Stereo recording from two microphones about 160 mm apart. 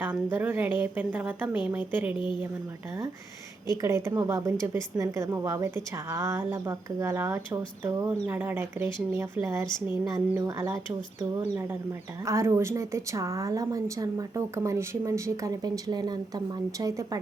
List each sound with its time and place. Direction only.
0.0 s a woman's voice: 10° right (ahead or behind)
3.7 s a woman's voice: 20° right (ahead or behind)